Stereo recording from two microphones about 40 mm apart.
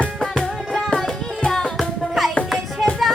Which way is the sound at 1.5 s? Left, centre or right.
Centre.